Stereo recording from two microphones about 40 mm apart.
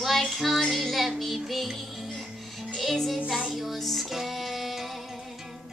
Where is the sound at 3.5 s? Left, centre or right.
Centre.